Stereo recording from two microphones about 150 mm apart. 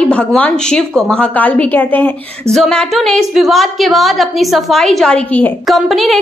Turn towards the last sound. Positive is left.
turn(degrees=0)  # may be behind; listen again after turning